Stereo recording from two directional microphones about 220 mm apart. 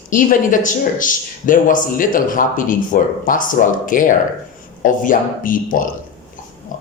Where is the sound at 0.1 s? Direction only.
40° left (ahead or behind).